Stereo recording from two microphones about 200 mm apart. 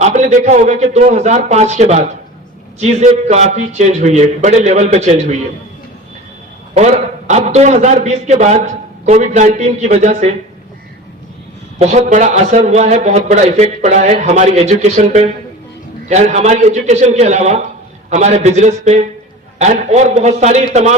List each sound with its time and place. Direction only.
0.0 s a man's voice: 35° right (ahead or behind)
6.7 s a man's voice: 35° right (ahead or behind)
11.8 s a man's voice: 35° right (ahead or behind)